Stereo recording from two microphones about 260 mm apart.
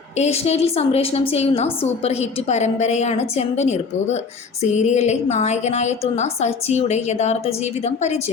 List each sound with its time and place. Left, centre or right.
0.2 s a woman's voice: left